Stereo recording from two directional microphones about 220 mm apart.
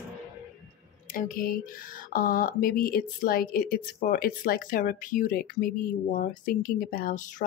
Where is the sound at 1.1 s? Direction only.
40° left (ahead or behind).